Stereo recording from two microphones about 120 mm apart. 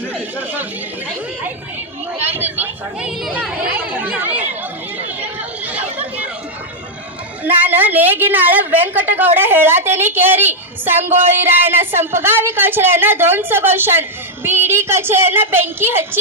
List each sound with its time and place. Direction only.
0.1 s chatter: 15° right (ahead or behind)
2.2 s a sound: 15° right (ahead or behind)
3.4 s chatter: 10° right (ahead or behind)
7.4 s a woman's voice: 15° right (ahead or behind)